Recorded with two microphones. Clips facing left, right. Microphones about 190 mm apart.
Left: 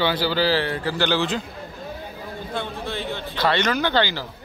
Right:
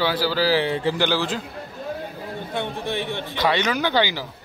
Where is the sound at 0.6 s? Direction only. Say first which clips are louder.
Right 3 dB; 20° right (ahead or behind).